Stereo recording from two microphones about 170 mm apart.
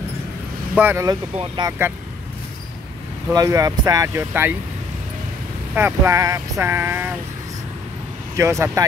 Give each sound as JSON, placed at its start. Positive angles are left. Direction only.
{"t": 0.7, "sound": "speech", "side_deg": -15}
{"t": 3.3, "sound": "speech", "side_deg": -20}
{"t": 5.8, "sound": "speech", "side_deg": -15}
{"t": 8.4, "sound": "speech", "side_deg": -15}